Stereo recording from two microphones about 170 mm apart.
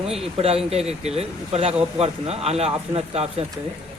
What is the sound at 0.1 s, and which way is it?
Speech, 35° right (ahead or behind).